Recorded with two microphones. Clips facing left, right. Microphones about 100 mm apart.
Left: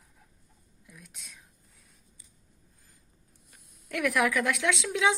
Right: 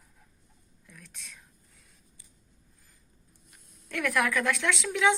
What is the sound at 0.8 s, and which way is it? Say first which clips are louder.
Speech: right 1 dB; 10° left (ahead or behind).